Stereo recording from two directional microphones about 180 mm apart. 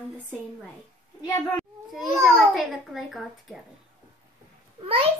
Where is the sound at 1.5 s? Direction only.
Centre (ahead or behind).